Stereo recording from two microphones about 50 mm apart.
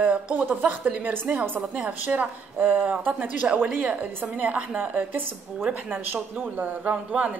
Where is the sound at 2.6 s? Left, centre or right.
Right.